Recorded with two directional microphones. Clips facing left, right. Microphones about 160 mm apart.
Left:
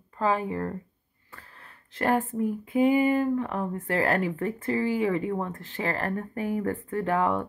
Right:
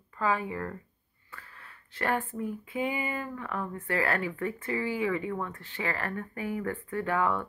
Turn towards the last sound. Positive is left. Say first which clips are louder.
# left 3 dB
turn(degrees=35)  # may be behind; listen again after turning